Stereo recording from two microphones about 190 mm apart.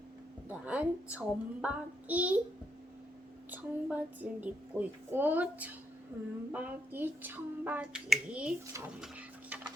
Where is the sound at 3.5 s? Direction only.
10° right (ahead or behind).